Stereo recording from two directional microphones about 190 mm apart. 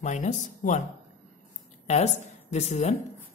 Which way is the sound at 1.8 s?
35° left (ahead or behind).